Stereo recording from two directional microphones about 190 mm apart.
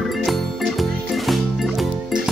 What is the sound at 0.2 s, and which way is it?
Music, centre (ahead or behind).